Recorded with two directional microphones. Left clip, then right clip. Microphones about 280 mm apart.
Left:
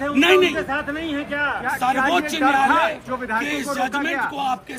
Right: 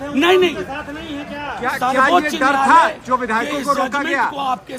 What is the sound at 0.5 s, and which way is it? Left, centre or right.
Speech, left.